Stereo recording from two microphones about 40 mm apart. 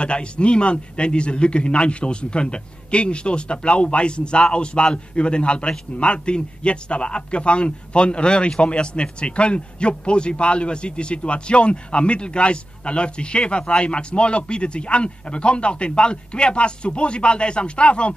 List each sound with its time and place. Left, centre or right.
0.0 s a man's voice: left